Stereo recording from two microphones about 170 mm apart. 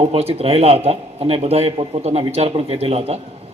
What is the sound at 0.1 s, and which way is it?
A man's voice, 35° right (ahead or behind).